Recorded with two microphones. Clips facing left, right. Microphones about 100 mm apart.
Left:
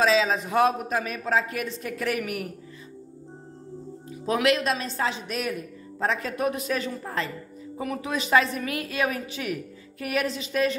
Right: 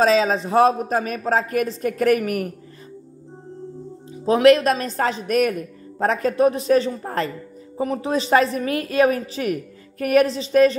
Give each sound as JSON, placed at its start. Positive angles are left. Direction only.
{"t": 0.0, "sound": "a woman's voice", "side_deg": -40}
{"t": 4.1, "sound": "a woman's voice", "side_deg": -35}